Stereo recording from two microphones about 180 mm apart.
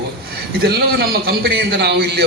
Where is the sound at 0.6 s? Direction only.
60° right (ahead or behind).